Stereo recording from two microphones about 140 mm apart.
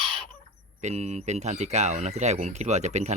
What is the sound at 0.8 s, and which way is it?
Speech, 50° right (ahead or behind).